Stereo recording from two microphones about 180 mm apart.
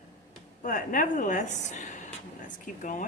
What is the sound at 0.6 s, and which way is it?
A woman's voice, 50° left (ahead or behind).